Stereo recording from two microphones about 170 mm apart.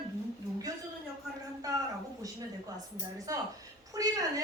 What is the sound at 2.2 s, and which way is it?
A woman's voice, 20° right (ahead or behind).